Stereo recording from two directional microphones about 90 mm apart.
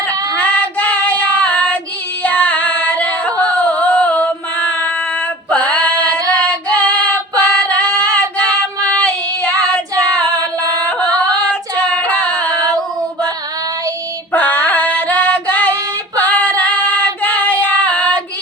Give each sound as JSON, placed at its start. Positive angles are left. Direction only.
{"t": 0.1, "sound": "child singing", "side_deg": 15}
{"t": 2.2, "sound": "singing", "side_deg": 15}
{"t": 4.7, "sound": "female singing", "side_deg": 15}
{"t": 11.4, "sound": "female singing", "side_deg": 10}
{"t": 14.3, "sound": "music", "side_deg": 15}
{"t": 16.1, "sound": "female singing", "side_deg": 15}